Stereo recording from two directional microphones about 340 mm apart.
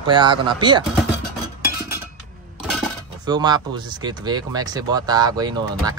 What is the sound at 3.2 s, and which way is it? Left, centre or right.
Speech, centre.